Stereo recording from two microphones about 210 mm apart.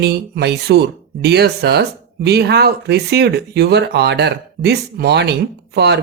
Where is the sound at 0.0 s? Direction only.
50° right (ahead or behind).